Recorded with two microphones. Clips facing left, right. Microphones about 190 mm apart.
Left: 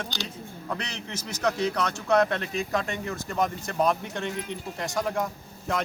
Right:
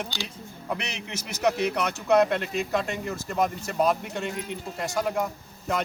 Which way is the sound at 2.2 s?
5° right (ahead or behind).